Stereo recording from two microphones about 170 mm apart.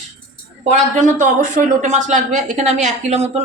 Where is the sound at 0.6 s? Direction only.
45° right (ahead or behind).